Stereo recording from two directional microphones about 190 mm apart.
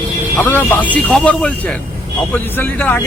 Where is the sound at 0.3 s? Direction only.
10° left (ahead or behind).